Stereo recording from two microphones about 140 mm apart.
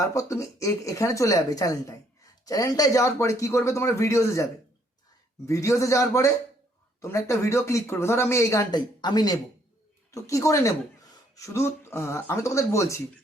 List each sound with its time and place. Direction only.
0.1 s speech: 20° left (ahead or behind)
5.5 s speech: 20° left (ahead or behind)